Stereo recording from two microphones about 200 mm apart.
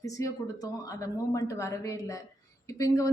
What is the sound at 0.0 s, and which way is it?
A woman's voice, 15° left (ahead or behind).